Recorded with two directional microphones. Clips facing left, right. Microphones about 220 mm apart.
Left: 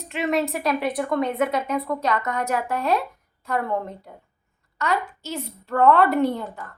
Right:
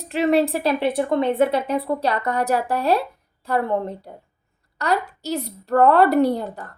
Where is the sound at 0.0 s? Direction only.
35° right (ahead or behind).